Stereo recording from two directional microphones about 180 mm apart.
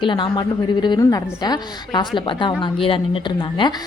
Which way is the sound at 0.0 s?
25° left (ahead or behind).